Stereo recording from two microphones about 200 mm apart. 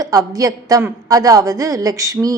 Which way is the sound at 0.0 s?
15° right (ahead or behind).